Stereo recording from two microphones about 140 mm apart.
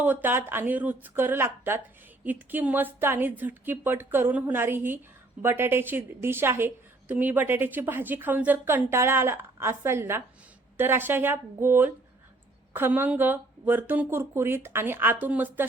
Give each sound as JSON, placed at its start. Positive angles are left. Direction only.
{"t": 0.0, "sound": "a woman's voice", "side_deg": -10}